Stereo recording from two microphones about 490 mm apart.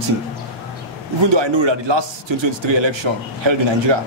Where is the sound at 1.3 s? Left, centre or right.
Right.